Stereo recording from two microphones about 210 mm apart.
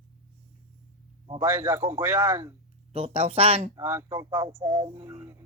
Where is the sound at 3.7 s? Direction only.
15° right (ahead or behind).